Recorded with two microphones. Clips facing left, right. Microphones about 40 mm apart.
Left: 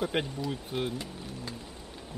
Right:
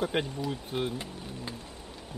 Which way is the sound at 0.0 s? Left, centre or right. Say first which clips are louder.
Right 1 dB; centre.